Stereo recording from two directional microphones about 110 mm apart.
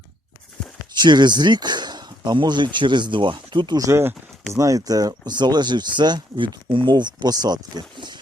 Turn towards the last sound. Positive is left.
turn(degrees=-40)  # may be behind; listen again after turning